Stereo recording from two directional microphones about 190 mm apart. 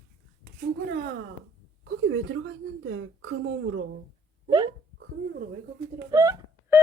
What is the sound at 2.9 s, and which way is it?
Speech, 75° right (ahead or behind).